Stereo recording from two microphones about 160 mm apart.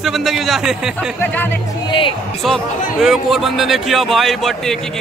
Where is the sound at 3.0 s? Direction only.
Centre (ahead or behind).